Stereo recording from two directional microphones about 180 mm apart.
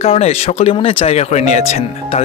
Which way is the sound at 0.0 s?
35° left (ahead or behind).